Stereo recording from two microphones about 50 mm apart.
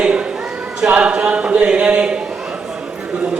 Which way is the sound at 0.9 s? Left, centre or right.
Right.